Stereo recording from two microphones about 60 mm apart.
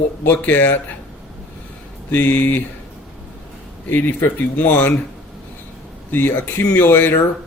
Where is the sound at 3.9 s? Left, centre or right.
Left.